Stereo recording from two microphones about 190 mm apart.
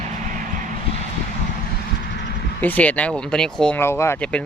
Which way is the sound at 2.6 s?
10° left (ahead or behind).